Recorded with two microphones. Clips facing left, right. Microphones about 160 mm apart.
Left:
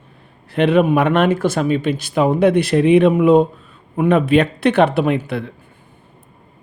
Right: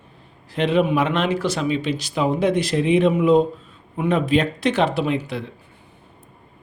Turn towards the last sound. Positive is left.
turn(degrees=60)  # may be behind; listen again after turning